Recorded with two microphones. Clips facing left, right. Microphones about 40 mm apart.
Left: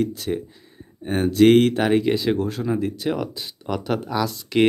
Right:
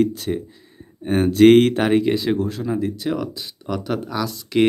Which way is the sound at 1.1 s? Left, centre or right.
Centre.